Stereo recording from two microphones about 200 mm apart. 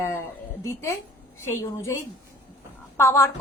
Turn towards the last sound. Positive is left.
turn(degrees=15)  # may be behind; listen again after turning